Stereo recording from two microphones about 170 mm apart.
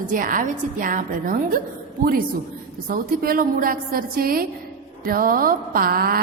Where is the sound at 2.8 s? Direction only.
60° right (ahead or behind).